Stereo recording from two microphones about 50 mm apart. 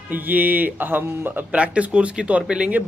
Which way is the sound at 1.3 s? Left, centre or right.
Right.